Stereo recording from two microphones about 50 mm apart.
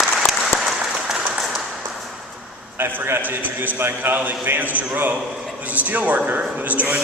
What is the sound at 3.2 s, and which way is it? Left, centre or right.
A man's voice, right.